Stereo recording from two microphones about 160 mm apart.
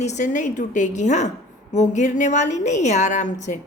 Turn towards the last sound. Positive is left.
turn(degrees=50)  # may be behind; listen again after turning